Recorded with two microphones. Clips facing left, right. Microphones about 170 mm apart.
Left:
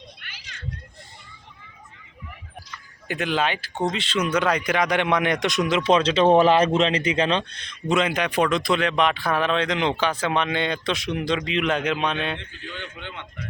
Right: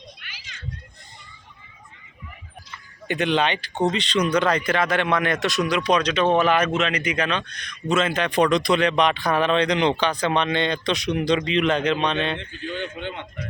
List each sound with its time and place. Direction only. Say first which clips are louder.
0.2 s children playing: even; 55° left (ahead or behind)
3.1 s a man's voice: right 3 dB; 5° left (ahead or behind)